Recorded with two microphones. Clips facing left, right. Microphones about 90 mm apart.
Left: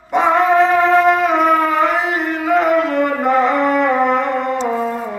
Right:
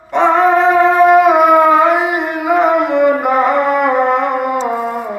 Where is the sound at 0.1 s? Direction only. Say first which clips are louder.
Right 3 dB; centre (ahead or behind).